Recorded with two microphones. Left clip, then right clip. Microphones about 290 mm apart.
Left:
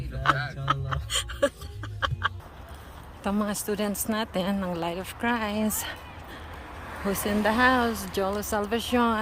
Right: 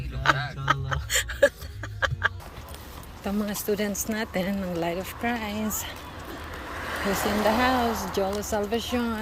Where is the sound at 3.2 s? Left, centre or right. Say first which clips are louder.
Left 2 dB; centre.